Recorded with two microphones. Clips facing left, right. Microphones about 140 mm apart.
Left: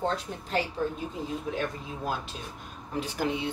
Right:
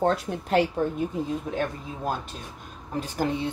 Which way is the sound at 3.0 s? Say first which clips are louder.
Right 3 dB; 45° right (ahead or behind).